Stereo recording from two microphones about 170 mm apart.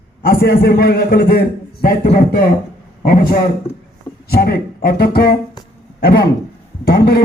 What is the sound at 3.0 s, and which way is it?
Speech, 55° left (ahead or behind).